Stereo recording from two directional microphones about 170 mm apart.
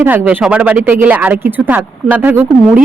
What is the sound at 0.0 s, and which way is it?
A woman's voice, 10° right (ahead or behind).